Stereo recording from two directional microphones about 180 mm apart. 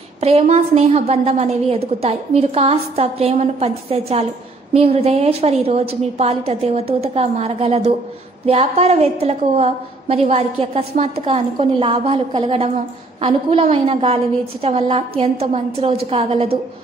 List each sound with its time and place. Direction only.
0.2 s a woman's voice: 35° right (ahead or behind)